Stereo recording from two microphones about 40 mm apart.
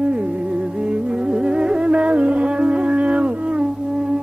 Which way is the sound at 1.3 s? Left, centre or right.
Right.